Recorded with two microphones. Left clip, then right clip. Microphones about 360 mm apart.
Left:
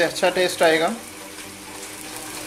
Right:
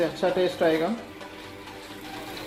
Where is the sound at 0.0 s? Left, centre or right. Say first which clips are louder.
Left 5 dB; left.